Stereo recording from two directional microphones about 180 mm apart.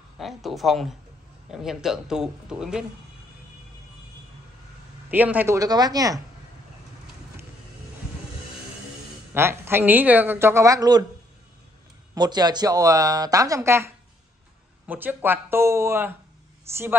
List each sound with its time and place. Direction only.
0.2 s speech: centre (ahead or behind)
5.1 s speech: 10° right (ahead or behind)
9.3 s a woman's voice: 10° right (ahead or behind)
12.2 s a woman's voice: 20° right (ahead or behind)